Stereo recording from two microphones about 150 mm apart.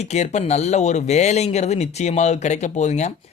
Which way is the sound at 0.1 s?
50° left (ahead or behind).